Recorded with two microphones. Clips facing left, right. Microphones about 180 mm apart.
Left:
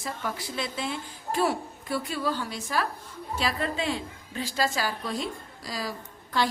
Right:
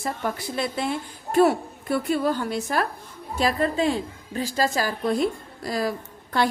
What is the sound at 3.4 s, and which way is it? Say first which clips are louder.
A woman's voice: right 7 dB; 45° right (ahead or behind).